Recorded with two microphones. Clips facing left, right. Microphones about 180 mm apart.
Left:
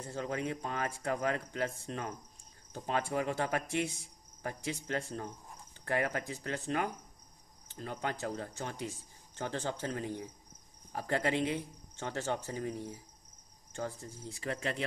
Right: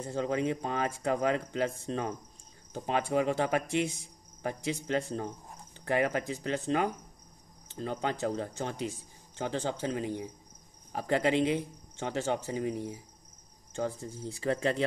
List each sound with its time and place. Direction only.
0.0 s speech: 20° right (ahead or behind)
14.4 s speech: 35° right (ahead or behind)